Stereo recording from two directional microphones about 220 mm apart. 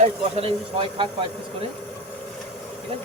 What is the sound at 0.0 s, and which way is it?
Speech, 25° right (ahead or behind).